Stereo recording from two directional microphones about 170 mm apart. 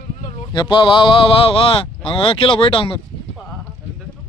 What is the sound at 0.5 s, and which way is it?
Speech, 25° left (ahead or behind).